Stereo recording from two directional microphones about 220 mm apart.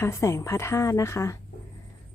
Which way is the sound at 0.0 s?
10° left (ahead or behind).